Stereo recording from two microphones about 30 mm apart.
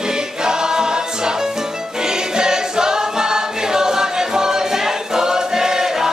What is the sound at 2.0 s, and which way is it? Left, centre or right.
Music, right.